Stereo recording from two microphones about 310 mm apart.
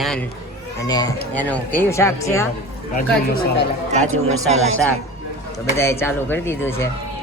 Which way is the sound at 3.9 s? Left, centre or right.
Right.